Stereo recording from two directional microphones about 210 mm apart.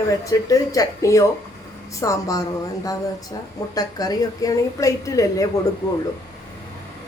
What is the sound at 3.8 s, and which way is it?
Speech, 15° left (ahead or behind).